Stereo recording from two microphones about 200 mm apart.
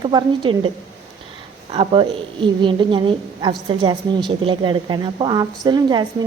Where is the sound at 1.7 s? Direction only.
25° right (ahead or behind).